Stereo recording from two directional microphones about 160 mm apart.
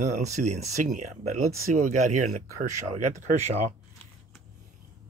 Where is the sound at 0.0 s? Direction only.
45° right (ahead or behind).